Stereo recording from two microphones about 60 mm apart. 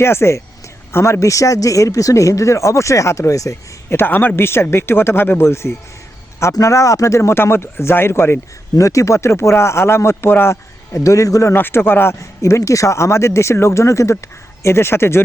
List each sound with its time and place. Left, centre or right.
0.0 s speech: left
3.8 s speech: left
6.5 s speech: left
8.7 s speech: left
10.9 s speech: left
11.5 s speech: left
12.4 s speech: left
14.6 s speech: left